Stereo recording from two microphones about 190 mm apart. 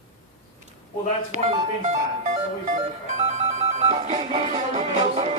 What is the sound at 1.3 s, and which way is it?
Music, 35° right (ahead or behind).